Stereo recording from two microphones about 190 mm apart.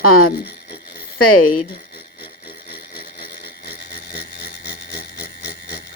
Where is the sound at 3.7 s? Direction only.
55° left (ahead or behind).